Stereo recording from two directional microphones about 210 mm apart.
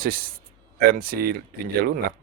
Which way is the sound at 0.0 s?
45° right (ahead or behind).